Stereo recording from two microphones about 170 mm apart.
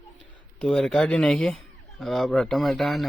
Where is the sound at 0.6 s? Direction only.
5° left (ahead or behind).